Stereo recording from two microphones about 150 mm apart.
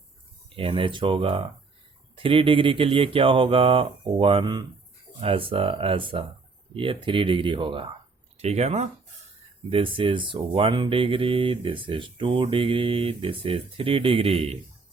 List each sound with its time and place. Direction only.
0.5 s speech: 35° right (ahead or behind)
8.4 s speech: 45° right (ahead or behind)
9.6 s speech: 35° right (ahead or behind)